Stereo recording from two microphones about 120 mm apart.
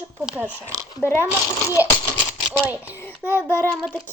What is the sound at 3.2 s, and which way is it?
Speech, 20° right (ahead or behind).